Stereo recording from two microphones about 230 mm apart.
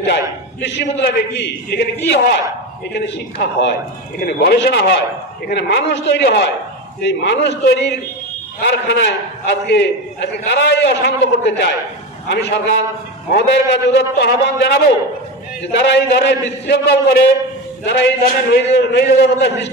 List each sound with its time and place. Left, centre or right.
0.6 s a man's voice: left